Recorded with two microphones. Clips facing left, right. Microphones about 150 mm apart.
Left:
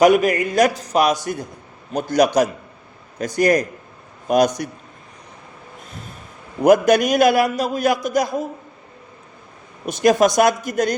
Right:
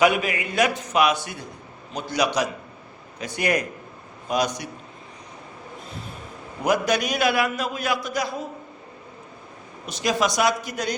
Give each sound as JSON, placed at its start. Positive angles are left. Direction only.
{"t": 0.0, "sound": "a man's voice", "side_deg": 45}
{"t": 6.7, "sound": "a man's voice", "side_deg": 50}
{"t": 9.8, "sound": "a man's voice", "side_deg": 55}